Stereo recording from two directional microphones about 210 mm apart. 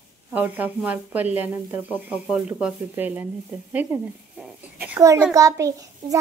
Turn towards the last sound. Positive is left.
turn(degrees=-15)  # may be behind; listen again after turning